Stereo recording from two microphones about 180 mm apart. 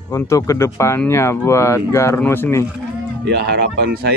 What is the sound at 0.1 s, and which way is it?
Speech, 15° left (ahead or behind).